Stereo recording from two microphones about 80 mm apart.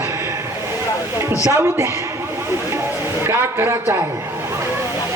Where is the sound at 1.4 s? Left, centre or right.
Right.